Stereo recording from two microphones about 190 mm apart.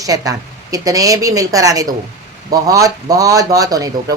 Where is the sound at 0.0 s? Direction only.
20° right (ahead or behind).